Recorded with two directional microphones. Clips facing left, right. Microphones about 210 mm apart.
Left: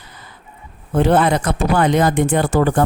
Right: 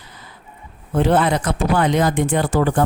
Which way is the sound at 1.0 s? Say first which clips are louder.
Left 2 dB; 50° left (ahead or behind).